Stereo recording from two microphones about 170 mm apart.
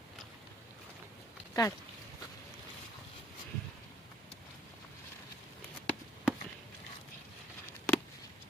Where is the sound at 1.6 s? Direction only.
25° left (ahead or behind).